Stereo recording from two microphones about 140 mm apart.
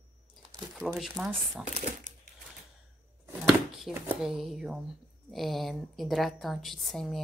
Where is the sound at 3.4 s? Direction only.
Centre (ahead or behind).